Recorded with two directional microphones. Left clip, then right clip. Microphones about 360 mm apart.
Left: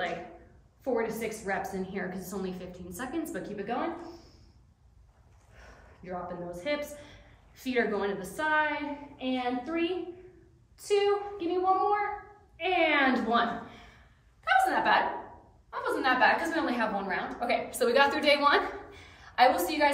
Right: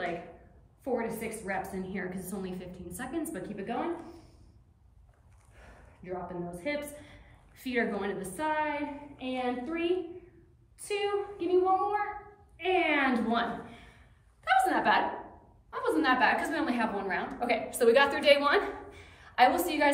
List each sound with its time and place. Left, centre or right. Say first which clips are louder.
0.9 s a woman's voice: left 2 dB; centre
5.6 s a woman's voice: left 2 dB; centre
14.4 s a sound: left 1 dB; centre
15.7 s a woman's voice: even; centre